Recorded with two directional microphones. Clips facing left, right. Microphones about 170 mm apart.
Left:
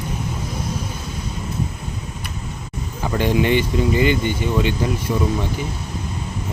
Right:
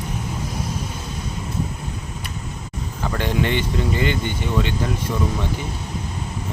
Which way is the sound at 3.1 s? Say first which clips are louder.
Left 4 dB; 15° left (ahead or behind).